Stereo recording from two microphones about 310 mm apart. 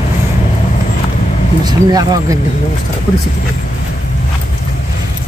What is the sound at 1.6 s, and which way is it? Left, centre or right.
Speech, centre.